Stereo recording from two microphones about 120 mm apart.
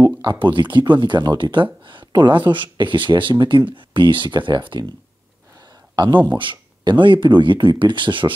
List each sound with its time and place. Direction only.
0.0 s speech: 40° right (ahead or behind)